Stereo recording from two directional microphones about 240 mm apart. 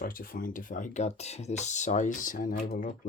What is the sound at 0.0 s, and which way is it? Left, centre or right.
Speech, left.